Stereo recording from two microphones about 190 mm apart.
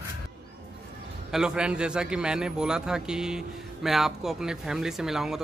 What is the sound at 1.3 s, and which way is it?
A man's voice, 5° right (ahead or behind).